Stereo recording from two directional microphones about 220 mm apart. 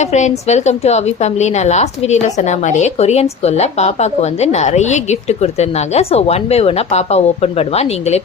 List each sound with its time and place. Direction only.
0.0 s a woman's voice: 30° left (ahead or behind)